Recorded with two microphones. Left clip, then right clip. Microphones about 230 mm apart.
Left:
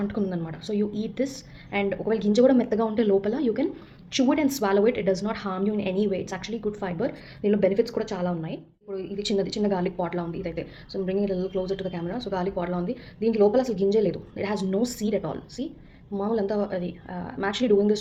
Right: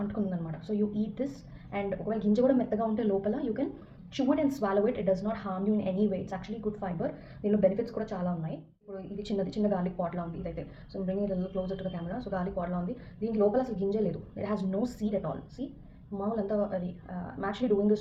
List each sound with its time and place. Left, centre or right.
0.8 s a woman's voice: left